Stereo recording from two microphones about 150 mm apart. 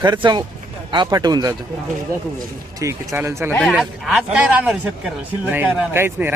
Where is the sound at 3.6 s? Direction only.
Centre (ahead or behind).